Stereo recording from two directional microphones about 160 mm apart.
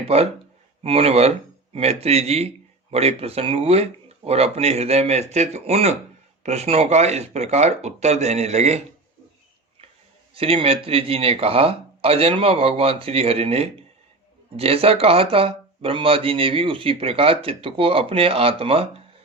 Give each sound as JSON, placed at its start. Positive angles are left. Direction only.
{"t": 0.0, "sound": "speech", "side_deg": -40}
{"t": 10.3, "sound": "speech", "side_deg": -35}